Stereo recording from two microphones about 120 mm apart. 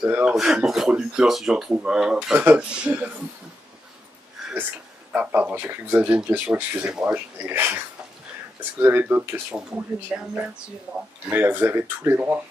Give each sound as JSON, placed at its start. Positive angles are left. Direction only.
{"t": 0.1, "sound": "speech", "side_deg": -5}
{"t": 5.1, "sound": "speech", "side_deg": -10}
{"t": 11.2, "sound": "speech", "side_deg": -15}